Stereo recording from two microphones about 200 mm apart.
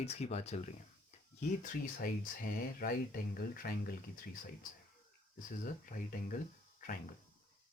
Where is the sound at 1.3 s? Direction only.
45° left (ahead or behind).